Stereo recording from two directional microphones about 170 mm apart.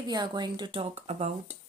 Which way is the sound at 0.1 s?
25° right (ahead or behind).